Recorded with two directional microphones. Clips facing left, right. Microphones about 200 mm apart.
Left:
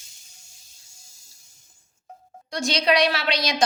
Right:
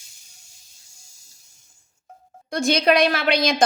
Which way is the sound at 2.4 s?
55° right (ahead or behind).